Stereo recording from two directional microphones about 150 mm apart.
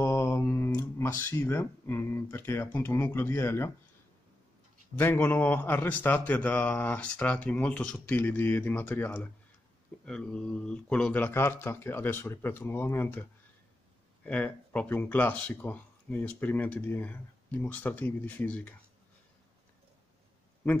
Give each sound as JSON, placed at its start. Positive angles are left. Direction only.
{"t": 0.0, "sound": "speech", "side_deg": 15}
{"t": 4.9, "sound": "speech", "side_deg": 15}